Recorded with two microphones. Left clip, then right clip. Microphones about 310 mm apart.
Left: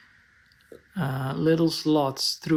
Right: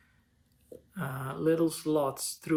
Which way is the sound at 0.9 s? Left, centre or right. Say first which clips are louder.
Left 7 dB; left.